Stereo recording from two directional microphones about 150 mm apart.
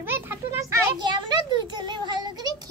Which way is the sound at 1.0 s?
30° right (ahead or behind).